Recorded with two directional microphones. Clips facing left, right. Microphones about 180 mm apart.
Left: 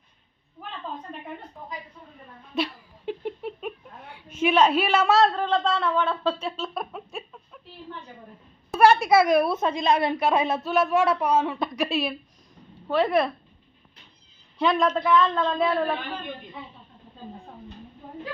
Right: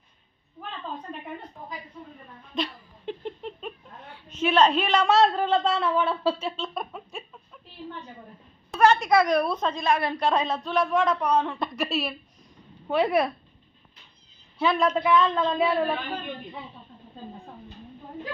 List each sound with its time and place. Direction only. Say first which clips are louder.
2.5 s a woman's voice: left 2 dB; 5° left (ahead or behind)
3.1 s a sound: left 3 dB; 10° left (ahead or behind); by 6.5 s 10° right (ahead or behind)
6.6 s a sound: left 1 dB; centre (ahead or behind)
8.7 s a woman's voice: left 2 dB; 10° left (ahead or behind)
9.8 s a woman's voice: left 3 dB; 20° left (ahead or behind)
10.2 s speech: left 2 dB; 5° left (ahead or behind)
12.9 s a woman's voice: left 1 dB; 15° right (ahead or behind)
14.6 s a woman's voice: left 1 dB; 5° right (ahead or behind)